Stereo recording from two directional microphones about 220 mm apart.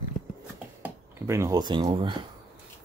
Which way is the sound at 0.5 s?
10° right (ahead or behind).